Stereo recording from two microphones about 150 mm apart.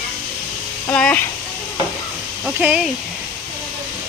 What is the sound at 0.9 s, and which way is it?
Speech, 10° left (ahead or behind).